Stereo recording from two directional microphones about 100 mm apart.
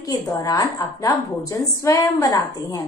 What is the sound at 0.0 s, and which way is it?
A woman's voice, 35° left (ahead or behind).